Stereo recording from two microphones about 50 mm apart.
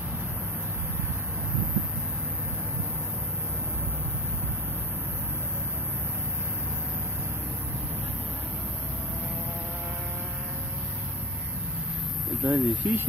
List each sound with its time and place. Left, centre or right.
12.4 s speech: right